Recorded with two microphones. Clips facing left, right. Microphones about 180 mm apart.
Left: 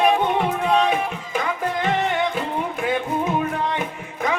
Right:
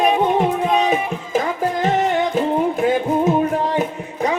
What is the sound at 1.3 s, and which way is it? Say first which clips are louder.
Music: right 5 dB; 40° right (ahead or behind).